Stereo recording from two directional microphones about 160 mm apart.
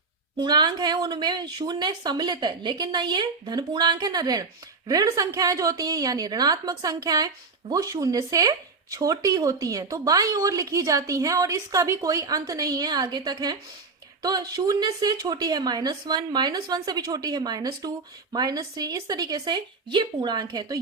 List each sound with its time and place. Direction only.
0.3 s speech: 25° right (ahead or behind)